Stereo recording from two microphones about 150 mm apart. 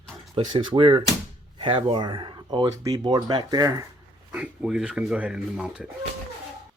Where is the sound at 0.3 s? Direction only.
30° right (ahead or behind).